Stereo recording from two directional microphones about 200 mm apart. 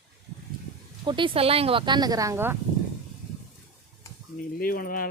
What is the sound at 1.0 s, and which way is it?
Speech, 25° right (ahead or behind).